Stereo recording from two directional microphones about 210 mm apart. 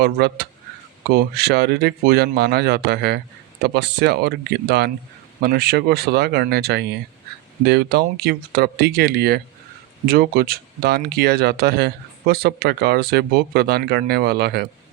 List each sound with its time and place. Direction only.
0.0 s speech: 50° right (ahead or behind)